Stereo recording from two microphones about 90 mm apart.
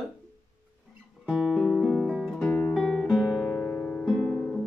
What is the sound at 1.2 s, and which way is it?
Music, 5° left (ahead or behind).